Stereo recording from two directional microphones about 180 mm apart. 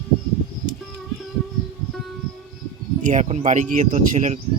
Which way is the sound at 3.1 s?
45° right (ahead or behind).